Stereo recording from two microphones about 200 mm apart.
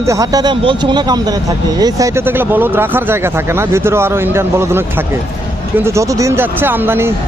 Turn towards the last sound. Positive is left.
turn(degrees=-10)  # may be behind; listen again after turning